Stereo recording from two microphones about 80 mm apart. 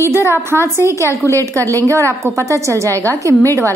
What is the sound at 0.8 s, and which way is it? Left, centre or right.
A woman's voice, right.